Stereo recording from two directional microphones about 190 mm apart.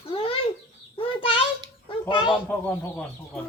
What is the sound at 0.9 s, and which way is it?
Bird, 30° left (ahead or behind).